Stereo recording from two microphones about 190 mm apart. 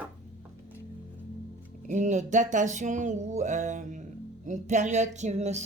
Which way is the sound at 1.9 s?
40° right (ahead or behind).